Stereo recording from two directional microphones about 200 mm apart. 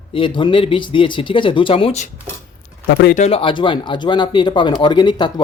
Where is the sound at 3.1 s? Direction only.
30° left (ahead or behind).